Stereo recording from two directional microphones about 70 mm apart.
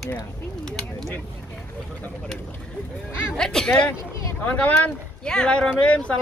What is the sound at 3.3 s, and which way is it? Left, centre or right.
A man's voice, centre.